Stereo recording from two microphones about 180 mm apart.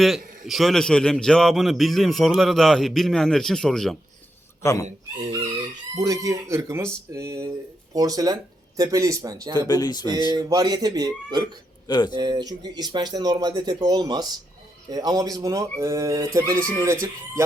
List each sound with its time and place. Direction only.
0.0 s a man's voice: centre (ahead or behind)
4.6 s speech: 15° left (ahead or behind)
5.9 s speech: 20° right (ahead or behind)
9.6 s speech: 20° left (ahead or behind)
10.3 s speech: 20° right (ahead or behind)
11.9 s speech: 25° left (ahead or behind)
12.1 s speech: 25° right (ahead or behind)